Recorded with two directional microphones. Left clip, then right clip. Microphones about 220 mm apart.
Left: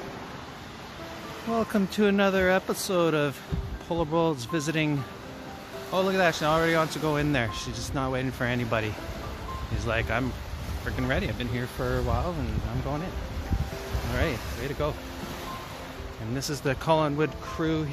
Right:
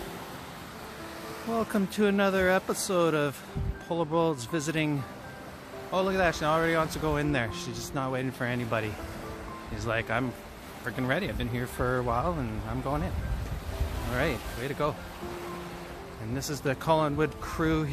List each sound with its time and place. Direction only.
1.6 s speech: centre (ahead or behind); by 12.4 s 20° right (ahead or behind)
14.8 s speech: 15° right (ahead or behind)
16.3 s speech: 5° right (ahead or behind)
17.5 s speech: 25° right (ahead or behind)